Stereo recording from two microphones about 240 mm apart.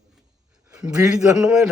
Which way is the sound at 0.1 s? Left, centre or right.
Centre.